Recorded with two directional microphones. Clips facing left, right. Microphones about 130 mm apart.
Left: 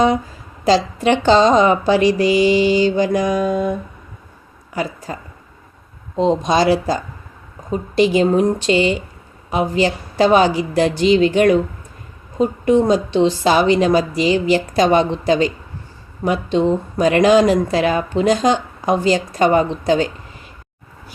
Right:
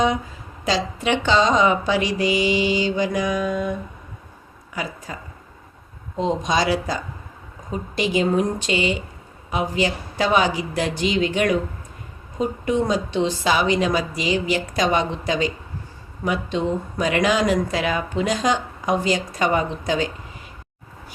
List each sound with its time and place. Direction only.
0.6 s a woman's voice: 35° left (ahead or behind)
6.1 s a woman's voice: 30° left (ahead or behind)
12.6 s a woman's voice: 30° left (ahead or behind)